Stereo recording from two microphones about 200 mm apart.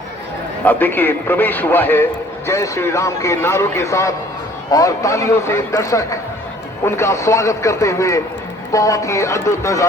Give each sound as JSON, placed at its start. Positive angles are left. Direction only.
{"t": 0.6, "sound": "a man's voice", "side_deg": 10}